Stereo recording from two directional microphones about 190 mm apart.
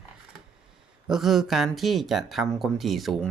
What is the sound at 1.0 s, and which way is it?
Speech, centre (ahead or behind).